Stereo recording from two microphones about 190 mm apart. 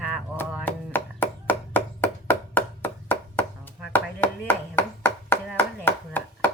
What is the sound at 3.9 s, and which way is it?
Chopping, 10° left (ahead or behind).